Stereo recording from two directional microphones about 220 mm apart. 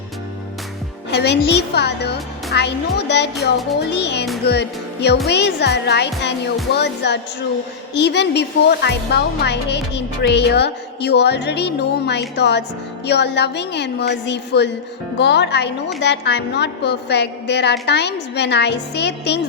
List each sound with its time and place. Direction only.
1.1 s speech: 50° left (ahead or behind)